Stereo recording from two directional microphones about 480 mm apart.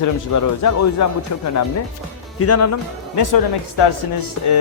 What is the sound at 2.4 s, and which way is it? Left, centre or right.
Speech, left.